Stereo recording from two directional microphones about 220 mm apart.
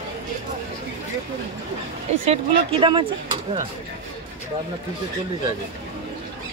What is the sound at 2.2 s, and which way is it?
Speech, 25° right (ahead or behind).